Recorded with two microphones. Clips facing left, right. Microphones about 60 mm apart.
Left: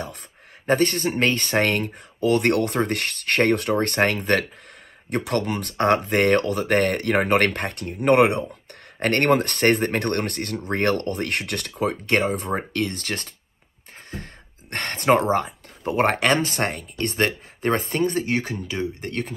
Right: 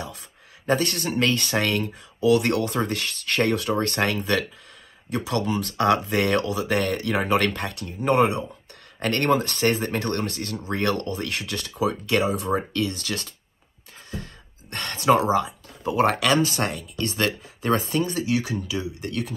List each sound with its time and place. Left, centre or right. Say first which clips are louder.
0.7 s speech: left 3 dB; left
9.0 s speech: left 3 dB; left
14.7 s speech: left 1 dB; left